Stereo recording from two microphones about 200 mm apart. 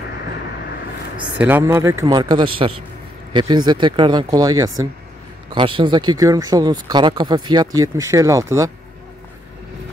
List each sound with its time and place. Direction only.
1.4 s speech: 10° right (ahead or behind)